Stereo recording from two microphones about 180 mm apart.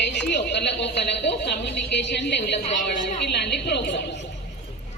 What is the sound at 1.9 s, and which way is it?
A woman's voice, 70° left (ahead or behind).